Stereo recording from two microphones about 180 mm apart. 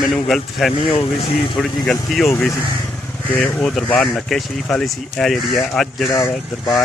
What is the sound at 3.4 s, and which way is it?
Speech, 5° left (ahead or behind).